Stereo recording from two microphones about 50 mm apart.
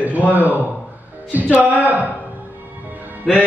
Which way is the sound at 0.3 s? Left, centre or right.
Right.